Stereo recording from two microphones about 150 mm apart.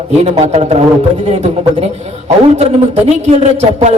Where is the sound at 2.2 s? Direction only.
45° right (ahead or behind).